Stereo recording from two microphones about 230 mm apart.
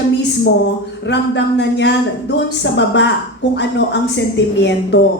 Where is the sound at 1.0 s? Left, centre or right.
Left.